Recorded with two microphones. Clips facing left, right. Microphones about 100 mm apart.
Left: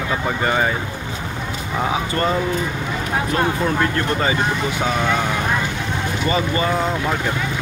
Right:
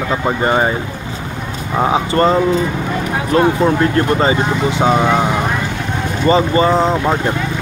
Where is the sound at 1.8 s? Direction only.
35° right (ahead or behind).